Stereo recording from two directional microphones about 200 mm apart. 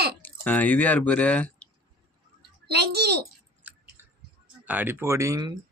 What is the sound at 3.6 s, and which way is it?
Chewing, 10° right (ahead or behind).